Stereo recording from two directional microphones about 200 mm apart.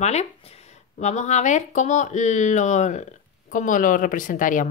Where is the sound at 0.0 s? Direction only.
30° left (ahead or behind).